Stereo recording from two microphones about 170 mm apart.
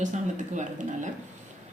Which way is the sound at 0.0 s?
45° right (ahead or behind).